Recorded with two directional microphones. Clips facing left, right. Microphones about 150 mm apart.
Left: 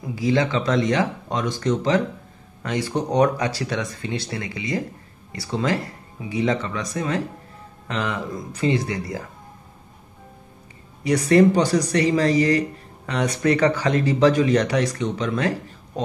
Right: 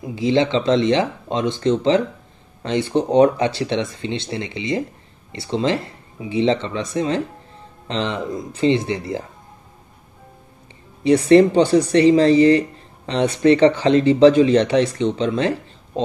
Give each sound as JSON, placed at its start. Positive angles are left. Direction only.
{"t": 0.0, "sound": "speech", "side_deg": -25}
{"t": 11.1, "sound": "speech", "side_deg": -25}